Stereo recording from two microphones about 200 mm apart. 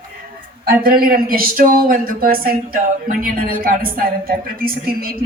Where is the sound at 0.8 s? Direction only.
45° right (ahead or behind).